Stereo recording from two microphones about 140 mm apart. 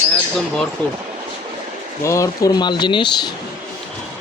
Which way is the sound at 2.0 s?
20° left (ahead or behind).